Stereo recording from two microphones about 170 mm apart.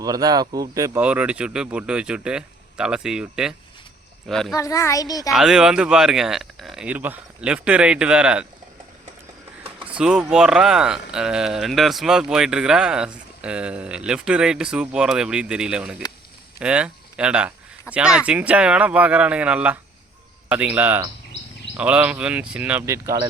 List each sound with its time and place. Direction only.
0.0 s speech: 20° right (ahead or behind); by 4.5 s centre (ahead or behind)
4.5 s a child's voice: 20° left (ahead or behind)
5.3 s speech: 5° right (ahead or behind)
9.8 s speech: 5° right (ahead or behind)